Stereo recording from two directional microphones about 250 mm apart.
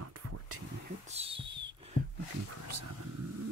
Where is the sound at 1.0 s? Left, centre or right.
Right.